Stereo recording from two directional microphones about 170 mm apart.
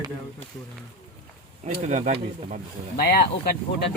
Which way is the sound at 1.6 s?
45° right (ahead or behind).